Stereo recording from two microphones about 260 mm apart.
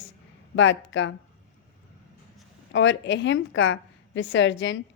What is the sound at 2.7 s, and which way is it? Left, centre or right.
A woman's voice, left.